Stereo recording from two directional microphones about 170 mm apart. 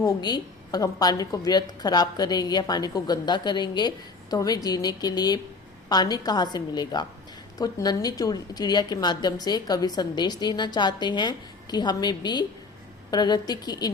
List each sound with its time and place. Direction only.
0.0 s a woman's voice: 25° left (ahead or behind)